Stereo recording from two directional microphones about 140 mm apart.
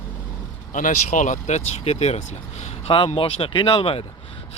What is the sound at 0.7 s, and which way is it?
Speech, 70° left (ahead or behind).